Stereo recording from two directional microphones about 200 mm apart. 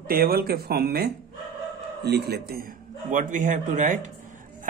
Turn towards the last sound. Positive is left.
turn(degrees=-40)  # may be behind; listen again after turning